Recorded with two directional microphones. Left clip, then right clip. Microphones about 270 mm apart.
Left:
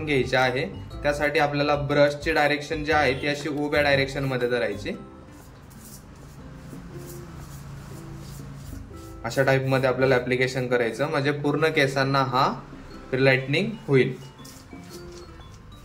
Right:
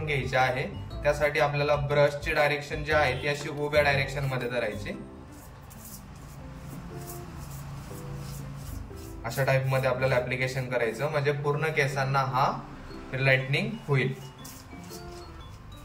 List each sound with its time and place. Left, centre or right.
0.0 s speech: centre
9.2 s a man's voice: centre